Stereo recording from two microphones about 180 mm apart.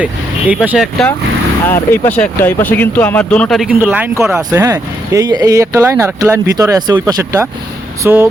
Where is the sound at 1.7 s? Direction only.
15° left (ahead or behind).